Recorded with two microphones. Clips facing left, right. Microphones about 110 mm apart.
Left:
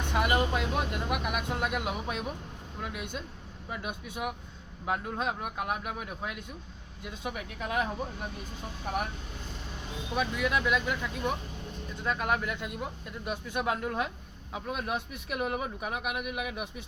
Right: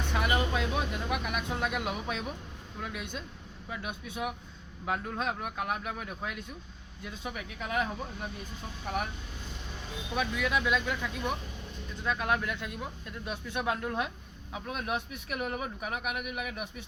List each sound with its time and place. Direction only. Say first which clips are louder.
0.0 s vehicle: left 2 dB; 10° left (ahead or behind)
0.7 s speech: left 1 dB; 5° left (ahead or behind)
10.2 s speech: left 1 dB; 5° left (ahead or behind)